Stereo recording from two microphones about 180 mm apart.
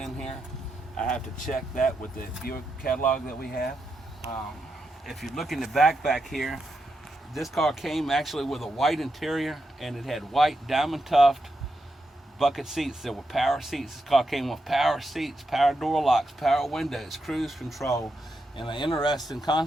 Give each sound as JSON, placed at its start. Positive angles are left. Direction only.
{"t": 0.0, "sound": "a sound", "side_deg": 5}
{"t": 0.9, "sound": "speech", "side_deg": 5}
{"t": 2.1, "sound": "speech", "side_deg": 55}
{"t": 5.0, "sound": "speech", "side_deg": 0}
{"t": 12.4, "sound": "speech", "side_deg": 0}
{"t": 18.5, "sound": "speech", "side_deg": 25}
{"t": 19.1, "sound": "speech", "side_deg": 0}